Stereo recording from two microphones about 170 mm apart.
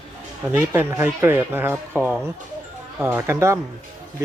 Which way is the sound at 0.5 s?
10° right (ahead or behind).